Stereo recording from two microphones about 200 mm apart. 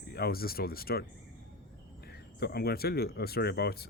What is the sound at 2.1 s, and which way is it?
Speech, 50° left (ahead or behind).